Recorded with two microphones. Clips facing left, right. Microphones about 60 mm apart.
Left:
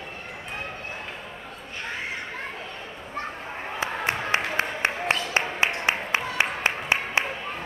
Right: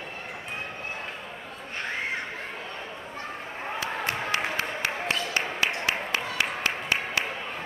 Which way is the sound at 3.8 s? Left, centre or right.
Left.